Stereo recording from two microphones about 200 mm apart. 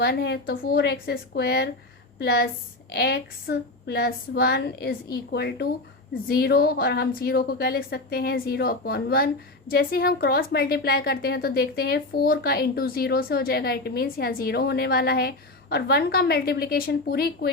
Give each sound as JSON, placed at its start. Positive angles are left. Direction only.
{"t": 0.0, "sound": "a woman's voice", "side_deg": 55}